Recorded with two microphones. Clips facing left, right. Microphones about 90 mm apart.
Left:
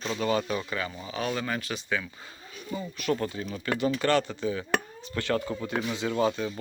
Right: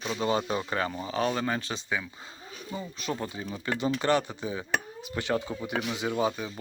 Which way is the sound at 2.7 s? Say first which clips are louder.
Left 5 dB; 20° right (ahead or behind).